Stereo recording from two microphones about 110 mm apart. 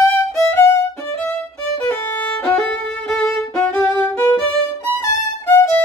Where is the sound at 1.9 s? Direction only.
15° left (ahead or behind).